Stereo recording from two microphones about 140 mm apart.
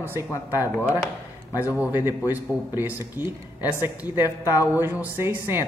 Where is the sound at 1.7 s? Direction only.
15° right (ahead or behind).